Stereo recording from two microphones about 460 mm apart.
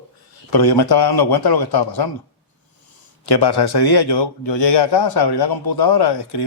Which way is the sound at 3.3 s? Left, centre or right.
Left.